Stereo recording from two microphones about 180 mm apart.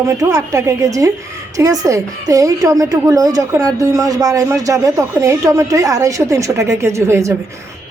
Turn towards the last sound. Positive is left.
turn(degrees=-15)  # may be behind; listen again after turning